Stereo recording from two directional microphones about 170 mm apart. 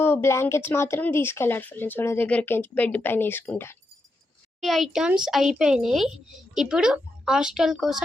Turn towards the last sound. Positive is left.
turn(degrees=0)  # may be behind; listen again after turning